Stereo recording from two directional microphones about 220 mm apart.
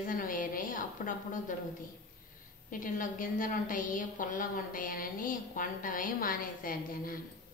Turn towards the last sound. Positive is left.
turn(degrees=40)  # may be behind; listen again after turning